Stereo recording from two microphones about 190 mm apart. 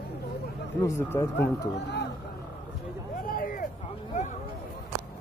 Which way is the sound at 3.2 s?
45° left (ahead or behind).